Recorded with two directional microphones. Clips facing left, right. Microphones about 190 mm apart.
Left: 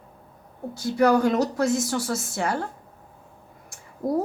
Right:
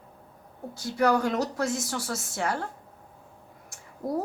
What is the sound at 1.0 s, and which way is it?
A woman's voice, 15° left (ahead or behind).